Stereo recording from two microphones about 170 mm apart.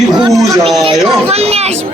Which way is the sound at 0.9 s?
35° right (ahead or behind).